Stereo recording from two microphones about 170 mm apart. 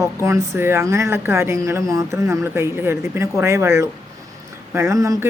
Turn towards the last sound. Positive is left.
turn(degrees=-20)  # may be behind; listen again after turning